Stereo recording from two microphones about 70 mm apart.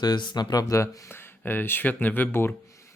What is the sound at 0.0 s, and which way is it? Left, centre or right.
Speech, left.